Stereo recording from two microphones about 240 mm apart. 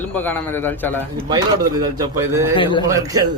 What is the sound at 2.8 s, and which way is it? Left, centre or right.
Speech, centre.